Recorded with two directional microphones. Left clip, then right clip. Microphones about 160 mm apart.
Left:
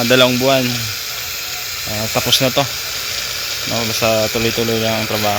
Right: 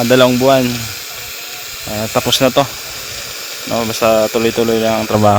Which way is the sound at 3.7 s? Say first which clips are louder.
Right 4 dB; 65° right (ahead or behind).